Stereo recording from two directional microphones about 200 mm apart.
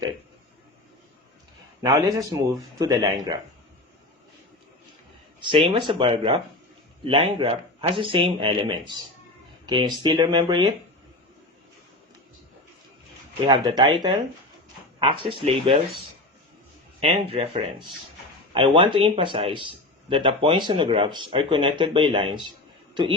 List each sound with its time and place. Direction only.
1.8 s a man's voice: 15° right (ahead or behind)
5.4 s speech: 25° right (ahead or behind)
13.5 s speech: 20° right (ahead or behind)
17.0 s speech: 30° right (ahead or behind)